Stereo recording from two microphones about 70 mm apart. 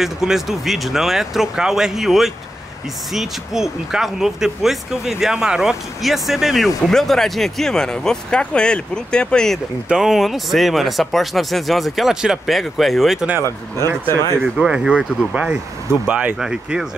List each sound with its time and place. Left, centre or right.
0.0 s speech: centre
9.8 s speech: centre
14.0 s speech: left
14.6 s speech: centre